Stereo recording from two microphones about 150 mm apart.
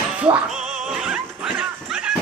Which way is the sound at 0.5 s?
5° right (ahead or behind).